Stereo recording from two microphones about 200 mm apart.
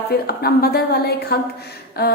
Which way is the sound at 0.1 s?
50° left (ahead or behind).